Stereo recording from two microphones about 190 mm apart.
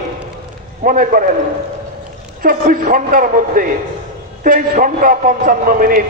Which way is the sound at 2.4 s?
45° right (ahead or behind).